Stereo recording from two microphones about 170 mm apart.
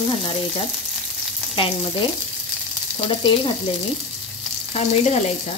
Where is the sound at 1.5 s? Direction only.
30° left (ahead or behind).